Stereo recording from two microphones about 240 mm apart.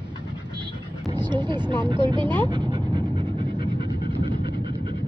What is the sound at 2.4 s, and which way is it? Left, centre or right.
Dog, centre.